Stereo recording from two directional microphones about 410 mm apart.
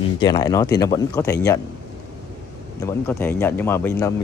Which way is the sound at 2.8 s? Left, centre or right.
Centre.